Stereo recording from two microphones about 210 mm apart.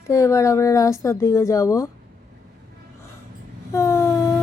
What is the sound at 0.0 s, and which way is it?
Speech, 15° left (ahead or behind).